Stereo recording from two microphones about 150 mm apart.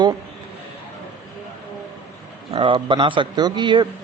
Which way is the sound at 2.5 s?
35° right (ahead or behind).